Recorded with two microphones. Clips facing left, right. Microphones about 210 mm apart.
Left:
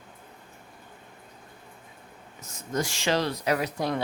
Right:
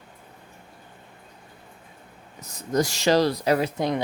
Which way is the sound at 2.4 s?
35° right (ahead or behind).